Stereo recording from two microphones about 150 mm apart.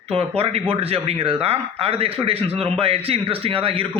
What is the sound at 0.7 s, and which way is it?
A man's voice, 40° right (ahead or behind).